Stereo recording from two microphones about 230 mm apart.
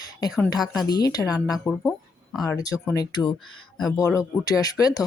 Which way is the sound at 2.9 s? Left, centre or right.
Centre.